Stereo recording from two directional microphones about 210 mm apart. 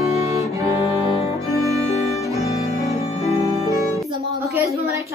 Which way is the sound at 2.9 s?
30° left (ahead or behind).